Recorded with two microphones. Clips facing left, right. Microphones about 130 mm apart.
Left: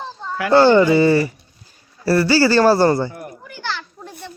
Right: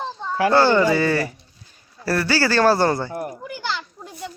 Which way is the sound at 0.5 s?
15° left (ahead or behind).